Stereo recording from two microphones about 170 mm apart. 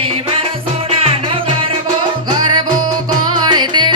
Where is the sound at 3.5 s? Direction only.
25° right (ahead or behind).